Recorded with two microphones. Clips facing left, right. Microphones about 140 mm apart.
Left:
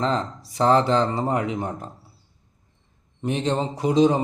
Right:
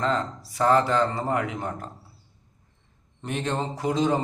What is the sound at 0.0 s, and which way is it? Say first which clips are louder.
Speech: left 2 dB; 25° left (ahead or behind).